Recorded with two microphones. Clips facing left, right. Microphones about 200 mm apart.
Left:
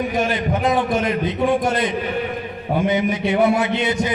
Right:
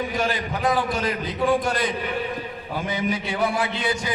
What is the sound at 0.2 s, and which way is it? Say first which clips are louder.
A man's voice: left 5 dB; 25° left (ahead or behind).